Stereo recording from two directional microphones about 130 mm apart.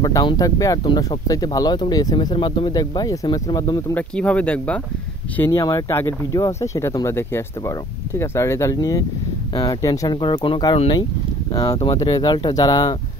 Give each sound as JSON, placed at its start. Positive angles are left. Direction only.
{"t": 0.0, "sound": "speech", "side_deg": 30}
{"t": 3.9, "sound": "speech", "side_deg": 10}
{"t": 5.5, "sound": "speech", "side_deg": 30}
{"t": 10.2, "sound": "speech", "side_deg": 40}
{"t": 12.0, "sound": "speech", "side_deg": 35}